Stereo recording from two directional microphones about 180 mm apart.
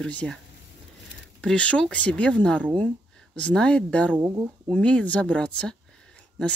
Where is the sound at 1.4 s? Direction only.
5° left (ahead or behind).